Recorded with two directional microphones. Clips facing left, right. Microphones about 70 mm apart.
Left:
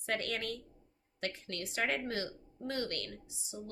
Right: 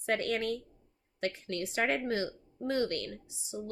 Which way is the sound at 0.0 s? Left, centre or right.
Right.